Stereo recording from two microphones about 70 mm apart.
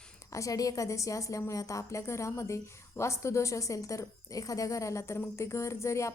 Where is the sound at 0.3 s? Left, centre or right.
Left.